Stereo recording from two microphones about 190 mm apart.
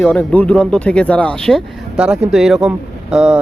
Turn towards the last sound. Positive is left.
turn(degrees=-5)  # may be behind; listen again after turning